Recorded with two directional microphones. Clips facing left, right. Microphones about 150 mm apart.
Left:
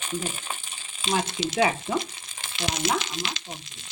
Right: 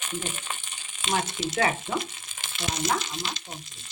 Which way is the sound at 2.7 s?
90° left.